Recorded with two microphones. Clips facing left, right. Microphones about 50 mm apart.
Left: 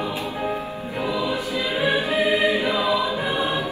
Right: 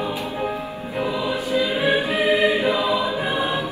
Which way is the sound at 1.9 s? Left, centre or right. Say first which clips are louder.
Even; right.